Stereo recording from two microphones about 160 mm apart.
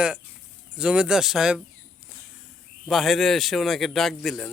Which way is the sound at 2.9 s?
Centre (ahead or behind).